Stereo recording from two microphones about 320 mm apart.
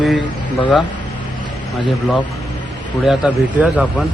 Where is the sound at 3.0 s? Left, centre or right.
Centre.